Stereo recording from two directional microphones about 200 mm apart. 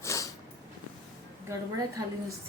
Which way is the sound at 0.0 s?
15° left (ahead or behind).